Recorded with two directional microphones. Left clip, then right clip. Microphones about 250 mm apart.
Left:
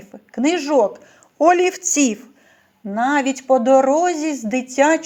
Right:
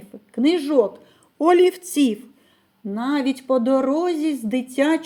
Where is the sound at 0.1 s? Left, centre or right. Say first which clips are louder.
Left 1 dB; centre.